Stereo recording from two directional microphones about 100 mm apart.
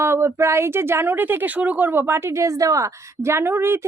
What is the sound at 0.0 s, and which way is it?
Speech, 25° right (ahead or behind).